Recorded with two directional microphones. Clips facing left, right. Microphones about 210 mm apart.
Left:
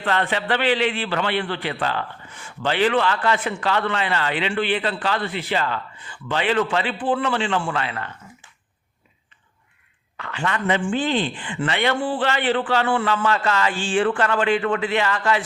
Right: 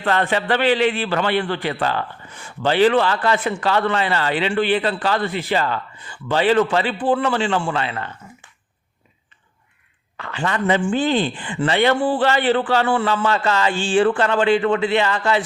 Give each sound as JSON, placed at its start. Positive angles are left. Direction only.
{"t": 0.1, "sound": "a man's voice", "side_deg": -40}
{"t": 7.6, "sound": "speech", "side_deg": -25}
{"t": 10.2, "sound": "speech", "side_deg": -35}